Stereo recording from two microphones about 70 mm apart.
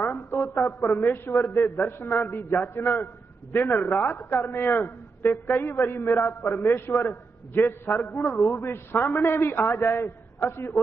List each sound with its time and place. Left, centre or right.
0.0 s a man's voice: left